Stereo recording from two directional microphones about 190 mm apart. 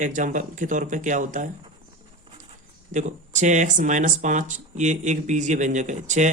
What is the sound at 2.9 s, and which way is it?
Speech, 40° right (ahead or behind).